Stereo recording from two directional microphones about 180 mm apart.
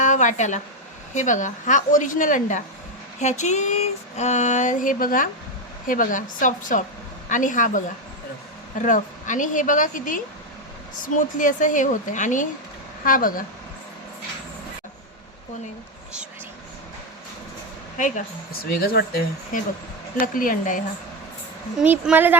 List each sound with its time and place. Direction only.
0.0 s a sound: 45° left (ahead or behind)
1.1 s a woman's voice: 45° left (ahead or behind)
8.8 s a woman's voice: 45° left (ahead or behind)
18.5 s a woman's voice: 55° left (ahead or behind)
21.8 s speech: 5° right (ahead or behind)